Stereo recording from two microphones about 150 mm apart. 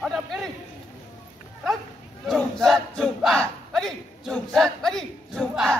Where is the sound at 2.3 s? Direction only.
Centre (ahead or behind).